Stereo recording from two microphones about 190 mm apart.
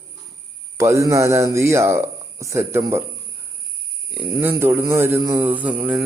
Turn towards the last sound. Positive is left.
turn(degrees=-5)  # may be behind; listen again after turning